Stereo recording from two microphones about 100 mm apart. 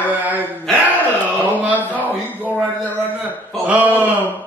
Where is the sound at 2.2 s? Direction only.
15° right (ahead or behind).